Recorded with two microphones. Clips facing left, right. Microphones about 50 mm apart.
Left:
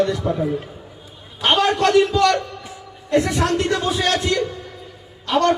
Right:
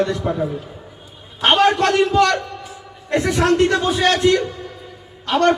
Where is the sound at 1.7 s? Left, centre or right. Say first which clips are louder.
Even; right.